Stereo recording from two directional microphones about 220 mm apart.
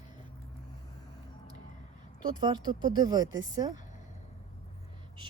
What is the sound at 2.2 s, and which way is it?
Speech, 20° right (ahead or behind).